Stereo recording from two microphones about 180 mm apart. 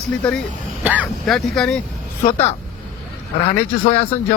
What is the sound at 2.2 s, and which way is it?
Speech, 35° left (ahead or behind).